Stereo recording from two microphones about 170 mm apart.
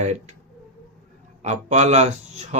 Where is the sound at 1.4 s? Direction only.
45° right (ahead or behind).